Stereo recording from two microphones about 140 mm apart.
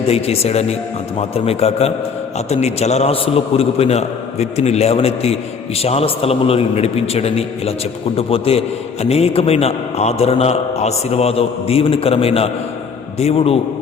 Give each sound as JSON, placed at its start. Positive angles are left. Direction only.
{"t": 0.0, "sound": "a man's voice", "side_deg": 45}